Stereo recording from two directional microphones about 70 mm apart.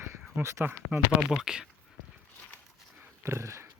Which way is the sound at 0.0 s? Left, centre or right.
Right.